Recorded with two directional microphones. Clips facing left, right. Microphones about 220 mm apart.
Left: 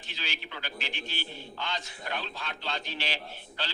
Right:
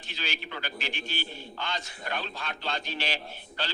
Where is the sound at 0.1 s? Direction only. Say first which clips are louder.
Right 3 dB; 45° right (ahead or behind).